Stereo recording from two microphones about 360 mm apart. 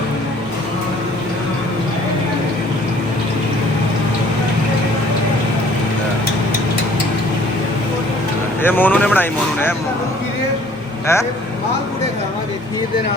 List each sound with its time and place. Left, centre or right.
8.6 s speech: centre
11.0 s speech: centre